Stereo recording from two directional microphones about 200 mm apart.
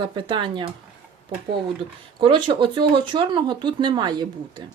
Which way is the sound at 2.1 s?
25° right (ahead or behind).